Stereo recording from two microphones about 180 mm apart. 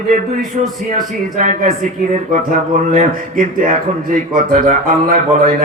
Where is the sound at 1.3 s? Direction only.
45° right (ahead or behind).